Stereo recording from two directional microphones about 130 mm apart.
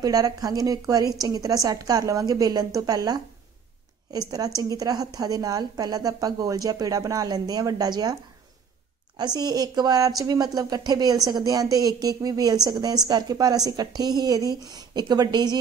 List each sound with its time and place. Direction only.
0.0 s a woman's voice: 30° right (ahead or behind)
4.6 s a woman's voice: 30° right (ahead or behind)